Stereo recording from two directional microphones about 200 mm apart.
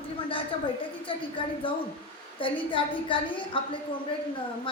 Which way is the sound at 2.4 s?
25° left (ahead or behind).